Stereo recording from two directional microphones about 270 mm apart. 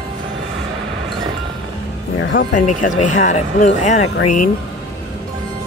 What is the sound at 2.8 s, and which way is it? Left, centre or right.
Speech, left.